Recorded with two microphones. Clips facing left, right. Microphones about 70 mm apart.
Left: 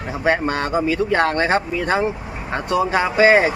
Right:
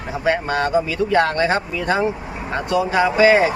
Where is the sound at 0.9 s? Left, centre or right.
Left.